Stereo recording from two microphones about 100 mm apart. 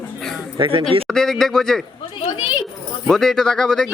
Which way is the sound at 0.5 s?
60° right (ahead or behind).